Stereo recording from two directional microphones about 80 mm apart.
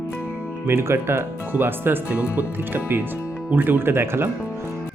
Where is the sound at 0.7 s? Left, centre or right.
Right.